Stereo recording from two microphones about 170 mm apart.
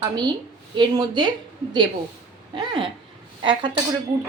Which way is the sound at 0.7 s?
25° right (ahead or behind).